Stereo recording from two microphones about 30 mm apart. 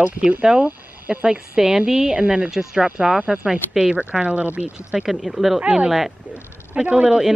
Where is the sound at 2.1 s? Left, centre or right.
Right.